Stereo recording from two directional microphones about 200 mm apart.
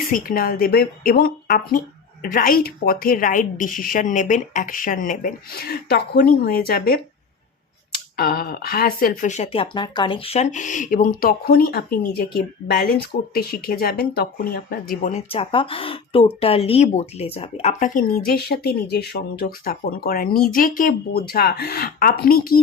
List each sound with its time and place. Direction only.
0.1 s speech: 45° left (ahead or behind)
15.1 s speech: 30° left (ahead or behind)
18.3 s speech: 50° left (ahead or behind)